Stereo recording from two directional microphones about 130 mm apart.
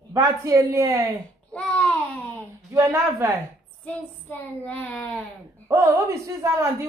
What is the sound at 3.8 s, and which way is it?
A woman's voice, 10° left (ahead or behind).